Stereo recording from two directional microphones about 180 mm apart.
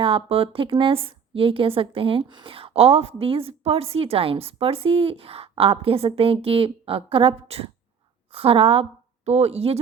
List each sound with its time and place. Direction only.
0.0 s a woman's voice: 30° right (ahead or behind)